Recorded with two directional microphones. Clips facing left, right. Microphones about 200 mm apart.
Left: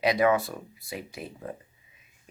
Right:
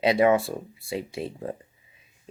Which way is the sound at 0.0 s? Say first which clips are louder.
Right 3 dB; 25° right (ahead or behind).